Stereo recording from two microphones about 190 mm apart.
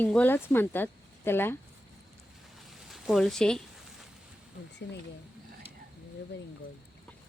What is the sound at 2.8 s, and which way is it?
Speech, centre (ahead or behind).